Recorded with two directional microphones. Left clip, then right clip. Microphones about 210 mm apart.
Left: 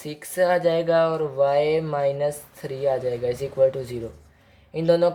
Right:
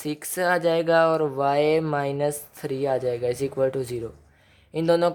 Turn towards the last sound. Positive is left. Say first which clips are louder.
# left 1 dB
turn(degrees=-40)  # may be behind; listen again after turning